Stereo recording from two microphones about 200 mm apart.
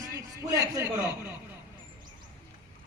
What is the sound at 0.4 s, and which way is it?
Speech, 15° right (ahead or behind).